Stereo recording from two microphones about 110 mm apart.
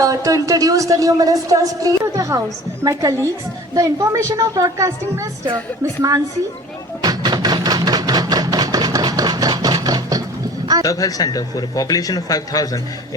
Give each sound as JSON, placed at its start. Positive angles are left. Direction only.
{"t": 0.0, "sound": "a woman's voice", "side_deg": -30}
{"t": 7.0, "sound": "a sound", "side_deg": -40}
{"t": 10.8, "sound": "a man's voice", "side_deg": 30}